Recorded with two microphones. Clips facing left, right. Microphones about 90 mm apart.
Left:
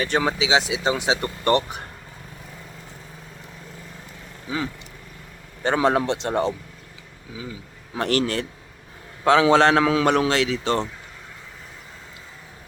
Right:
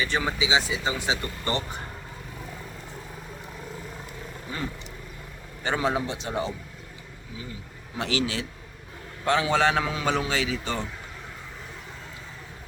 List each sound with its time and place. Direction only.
0.0 s speech: 65° left (ahead or behind)
5.6 s speech: 65° left (ahead or behind)
7.9 s speech: 55° left (ahead or behind)
9.2 s a man's voice: 90° left